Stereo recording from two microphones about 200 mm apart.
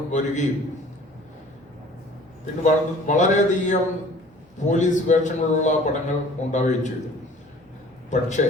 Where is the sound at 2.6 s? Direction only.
40° left (ahead or behind).